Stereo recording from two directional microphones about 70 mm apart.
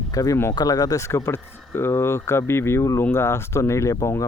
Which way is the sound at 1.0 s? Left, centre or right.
Left.